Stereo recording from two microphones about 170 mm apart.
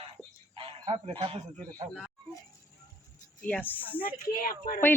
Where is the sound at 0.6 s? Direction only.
30° right (ahead or behind).